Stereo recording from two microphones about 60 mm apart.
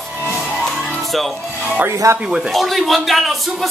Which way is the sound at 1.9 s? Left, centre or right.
Right.